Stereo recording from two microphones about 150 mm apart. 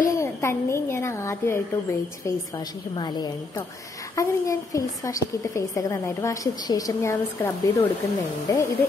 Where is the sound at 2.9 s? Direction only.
25° left (ahead or behind).